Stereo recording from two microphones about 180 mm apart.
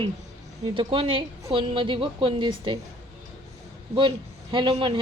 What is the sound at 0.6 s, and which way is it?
A woman's voice, 30° right (ahead or behind).